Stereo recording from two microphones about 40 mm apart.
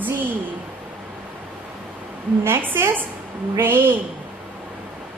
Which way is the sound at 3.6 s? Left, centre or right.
Right.